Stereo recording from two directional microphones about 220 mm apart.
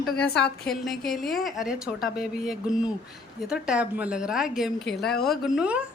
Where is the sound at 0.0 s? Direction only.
Centre (ahead or behind).